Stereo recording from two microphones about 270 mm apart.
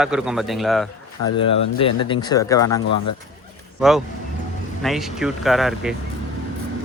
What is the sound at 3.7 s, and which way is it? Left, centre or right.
A man's voice, centre.